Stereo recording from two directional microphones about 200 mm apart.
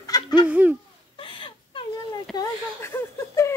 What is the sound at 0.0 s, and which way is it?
Fowl, 20° left (ahead or behind).